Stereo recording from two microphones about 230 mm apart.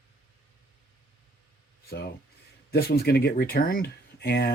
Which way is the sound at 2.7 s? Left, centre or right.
Left.